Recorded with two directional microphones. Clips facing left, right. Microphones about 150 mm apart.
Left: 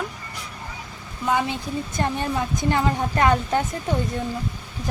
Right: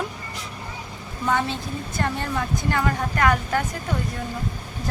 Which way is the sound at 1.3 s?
15° left (ahead or behind).